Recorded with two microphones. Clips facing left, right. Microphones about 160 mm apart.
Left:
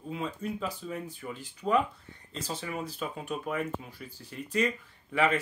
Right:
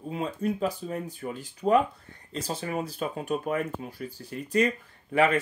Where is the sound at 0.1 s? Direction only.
45° right (ahead or behind).